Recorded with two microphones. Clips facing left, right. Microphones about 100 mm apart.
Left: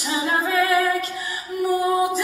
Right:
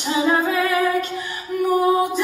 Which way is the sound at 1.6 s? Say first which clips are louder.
Right 3 dB; 30° right (ahead or behind).